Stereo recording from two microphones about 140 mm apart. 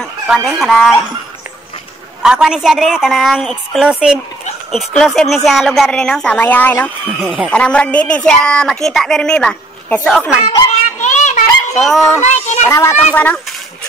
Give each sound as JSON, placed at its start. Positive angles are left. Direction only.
{"t": 0.0, "sound": "speech", "side_deg": 0}
{"t": 2.2, "sound": "a woman's voice", "side_deg": -5}
{"t": 7.2, "sound": "a woman's voice", "side_deg": 0}
{"t": 7.5, "sound": "a woman's voice", "side_deg": 10}
{"t": 10.7, "sound": "child singing", "side_deg": 55}
{"t": 11.7, "sound": "a woman's voice", "side_deg": 0}
{"t": 12.3, "sound": "a child's voice", "side_deg": 60}
{"t": 12.6, "sound": "a child's voice", "side_deg": 20}